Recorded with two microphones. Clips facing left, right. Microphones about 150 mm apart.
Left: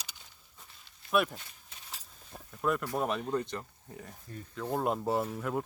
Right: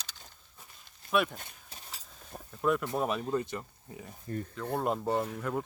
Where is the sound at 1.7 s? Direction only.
35° right (ahead or behind).